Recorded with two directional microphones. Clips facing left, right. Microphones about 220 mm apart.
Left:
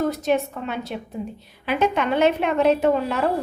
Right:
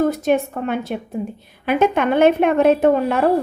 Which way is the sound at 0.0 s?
50° right (ahead or behind).